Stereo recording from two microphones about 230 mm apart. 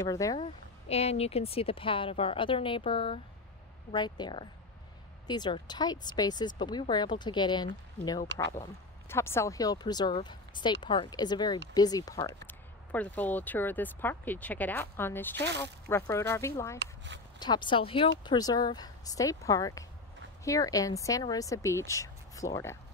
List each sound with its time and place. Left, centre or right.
0.0 s speech: centre
0.8 s speech: left
16.7 s speech: right
17.4 s speech: centre